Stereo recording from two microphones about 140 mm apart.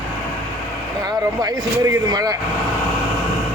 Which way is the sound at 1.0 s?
25° right (ahead or behind).